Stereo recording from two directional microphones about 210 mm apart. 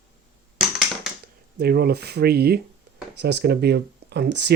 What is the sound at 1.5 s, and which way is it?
Speech, 50° right (ahead or behind).